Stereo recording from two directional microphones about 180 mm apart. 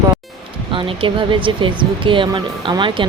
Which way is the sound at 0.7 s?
30° right (ahead or behind).